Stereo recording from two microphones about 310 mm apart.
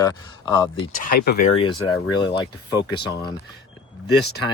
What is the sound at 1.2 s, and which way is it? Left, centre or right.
Speech, left.